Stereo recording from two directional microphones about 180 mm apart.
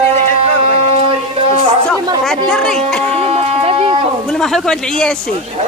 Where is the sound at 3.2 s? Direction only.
35° right (ahead or behind).